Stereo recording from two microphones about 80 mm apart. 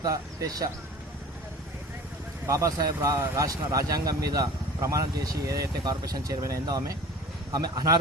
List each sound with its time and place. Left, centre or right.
0.0 s speech: right
2.5 s speech: right